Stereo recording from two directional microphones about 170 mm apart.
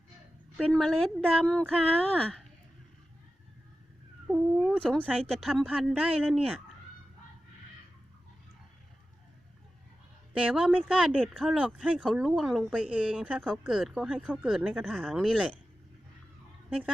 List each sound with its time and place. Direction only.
0.6 s speech: 5° left (ahead or behind)
4.3 s cat: 5° right (ahead or behind)
4.9 s speech: 5° left (ahead or behind)
10.3 s speech: 5° right (ahead or behind)
16.6 s a woman's voice: 5° right (ahead or behind)